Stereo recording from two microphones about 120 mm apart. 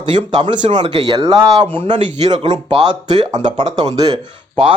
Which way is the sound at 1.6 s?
45° right (ahead or behind).